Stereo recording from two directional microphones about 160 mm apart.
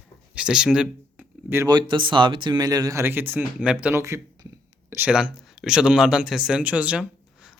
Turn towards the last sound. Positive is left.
turn(degrees=-5)  # may be behind; listen again after turning